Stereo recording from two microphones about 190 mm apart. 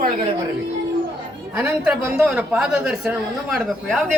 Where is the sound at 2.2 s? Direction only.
5° right (ahead or behind).